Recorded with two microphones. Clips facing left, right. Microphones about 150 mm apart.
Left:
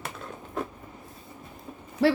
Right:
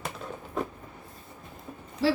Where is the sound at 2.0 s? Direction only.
60° left (ahead or behind).